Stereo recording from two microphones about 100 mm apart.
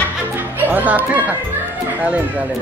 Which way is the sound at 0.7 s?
15° right (ahead or behind).